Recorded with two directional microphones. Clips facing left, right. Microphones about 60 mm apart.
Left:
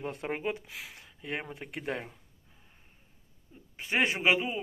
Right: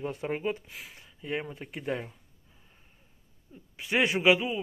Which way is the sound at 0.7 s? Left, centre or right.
Left.